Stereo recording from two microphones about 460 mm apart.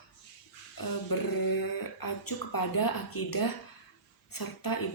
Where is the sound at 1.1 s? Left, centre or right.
Left.